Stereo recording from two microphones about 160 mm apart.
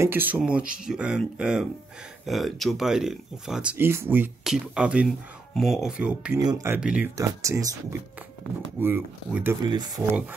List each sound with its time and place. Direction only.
0.0 s speech: 15° right (ahead or behind)
3.7 s speech: 15° right (ahead or behind)
6.4 s speech: 20° right (ahead or behind)
6.8 s speech: 5° right (ahead or behind)
7.2 s speech: 20° right (ahead or behind)
8.7 s speech: 15° right (ahead or behind)
9.6 s speech: 25° right (ahead or behind)